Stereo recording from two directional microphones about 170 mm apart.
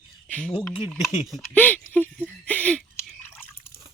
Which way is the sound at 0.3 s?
5° left (ahead or behind).